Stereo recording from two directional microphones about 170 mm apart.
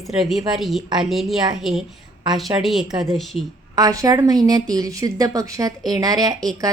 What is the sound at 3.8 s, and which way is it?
A woman's voice, 20° right (ahead or behind).